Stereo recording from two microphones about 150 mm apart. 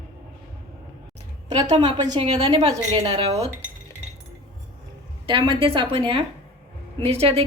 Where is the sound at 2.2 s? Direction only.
45° right (ahead or behind).